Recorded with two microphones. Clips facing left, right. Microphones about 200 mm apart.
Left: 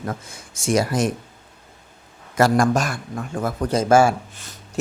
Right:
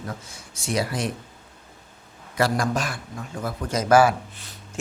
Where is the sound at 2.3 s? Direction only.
45° left (ahead or behind).